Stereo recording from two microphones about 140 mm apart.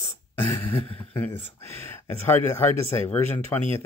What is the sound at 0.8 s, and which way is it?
Speech, 40° left (ahead or behind).